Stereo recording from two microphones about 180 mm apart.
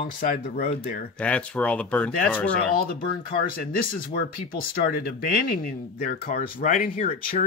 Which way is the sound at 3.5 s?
55° left (ahead or behind).